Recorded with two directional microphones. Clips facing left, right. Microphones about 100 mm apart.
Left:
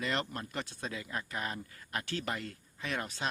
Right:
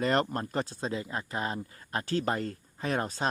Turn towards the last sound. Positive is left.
turn(degrees=-40)  # may be behind; listen again after turning